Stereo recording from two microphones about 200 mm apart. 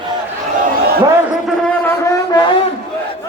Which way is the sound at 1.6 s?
10° left (ahead or behind).